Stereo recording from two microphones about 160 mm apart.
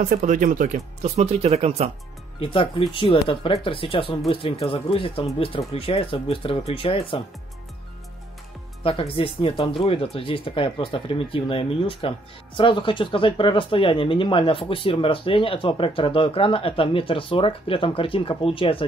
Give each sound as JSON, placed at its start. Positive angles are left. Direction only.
{"t": 0.0, "sound": "speech", "side_deg": -55}
{"t": 2.4, "sound": "speech", "side_deg": 30}
{"t": 8.8, "sound": "speech", "side_deg": 35}